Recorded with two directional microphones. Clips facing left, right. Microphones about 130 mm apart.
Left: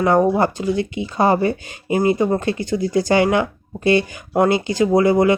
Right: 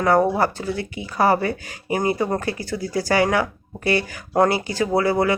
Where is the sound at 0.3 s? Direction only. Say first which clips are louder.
Left 4 dB; 20° left (ahead or behind).